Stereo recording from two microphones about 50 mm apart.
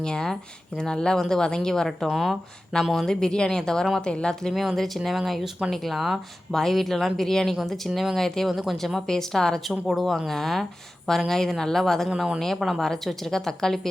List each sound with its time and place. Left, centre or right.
0.0 s speech: centre
2.0 s speech: centre
4.5 s speech: centre